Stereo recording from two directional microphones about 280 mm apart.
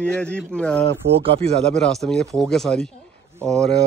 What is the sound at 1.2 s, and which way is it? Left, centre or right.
Speech, centre.